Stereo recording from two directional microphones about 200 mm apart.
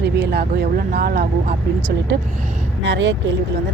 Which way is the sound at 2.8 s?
65° right (ahead or behind).